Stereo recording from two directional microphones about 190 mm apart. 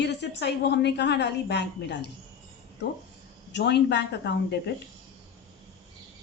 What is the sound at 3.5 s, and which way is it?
A woman's voice, 65° left (ahead or behind).